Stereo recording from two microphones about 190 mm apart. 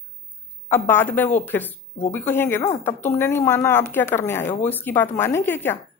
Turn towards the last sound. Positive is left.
turn(degrees=10)  # may be behind; listen again after turning